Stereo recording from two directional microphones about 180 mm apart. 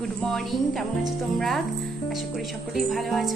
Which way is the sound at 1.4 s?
Centre (ahead or behind).